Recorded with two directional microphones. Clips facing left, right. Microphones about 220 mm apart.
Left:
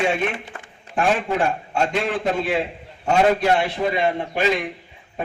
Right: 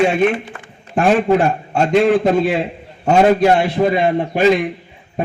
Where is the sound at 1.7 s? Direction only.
40° right (ahead or behind).